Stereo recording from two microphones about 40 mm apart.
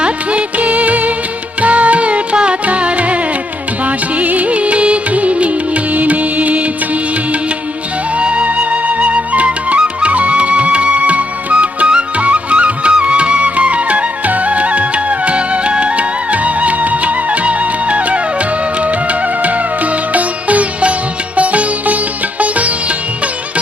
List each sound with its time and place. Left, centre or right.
0.0 s music: right
21.3 s sitar: right